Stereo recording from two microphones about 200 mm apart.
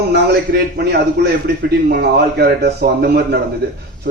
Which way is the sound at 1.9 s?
50° right (ahead or behind).